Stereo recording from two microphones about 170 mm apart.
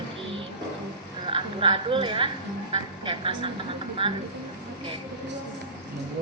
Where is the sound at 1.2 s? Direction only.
30° right (ahead or behind).